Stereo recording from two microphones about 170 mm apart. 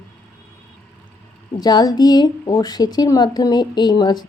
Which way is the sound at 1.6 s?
25° left (ahead or behind).